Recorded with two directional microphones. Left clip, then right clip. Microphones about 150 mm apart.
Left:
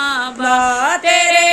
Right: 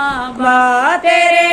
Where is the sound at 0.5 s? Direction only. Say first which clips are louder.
Right 3 dB; centre (ahead or behind).